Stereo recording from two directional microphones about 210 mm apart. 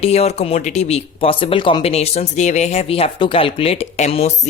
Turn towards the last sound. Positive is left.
turn(degrees=30)  # may be behind; listen again after turning